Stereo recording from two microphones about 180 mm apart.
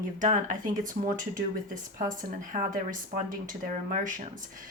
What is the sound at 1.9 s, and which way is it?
Speech, 50° right (ahead or behind).